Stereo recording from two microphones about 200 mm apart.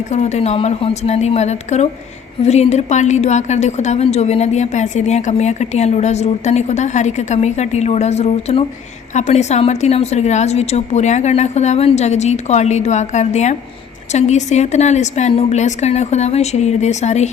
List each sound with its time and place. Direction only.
0.1 s a woman's voice: 35° left (ahead or behind)